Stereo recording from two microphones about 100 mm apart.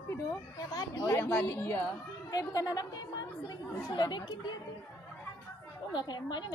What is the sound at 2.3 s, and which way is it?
A woman's voice, 40° left (ahead or behind).